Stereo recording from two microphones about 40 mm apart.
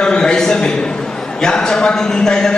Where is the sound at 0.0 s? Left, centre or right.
Left.